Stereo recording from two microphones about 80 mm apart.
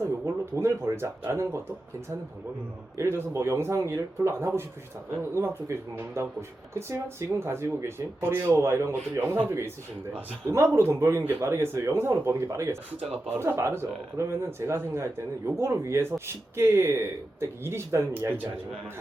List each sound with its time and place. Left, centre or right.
0.0 s speech: right
3.0 s speech: right